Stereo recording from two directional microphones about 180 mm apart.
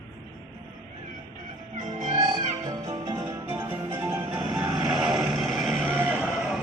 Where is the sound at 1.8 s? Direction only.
40° right (ahead or behind).